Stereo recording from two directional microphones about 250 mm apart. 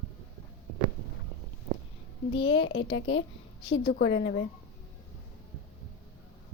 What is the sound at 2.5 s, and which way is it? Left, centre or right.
A child's voice, left.